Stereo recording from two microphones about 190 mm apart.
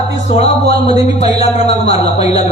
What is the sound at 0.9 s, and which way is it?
A man's voice, 35° left (ahead or behind).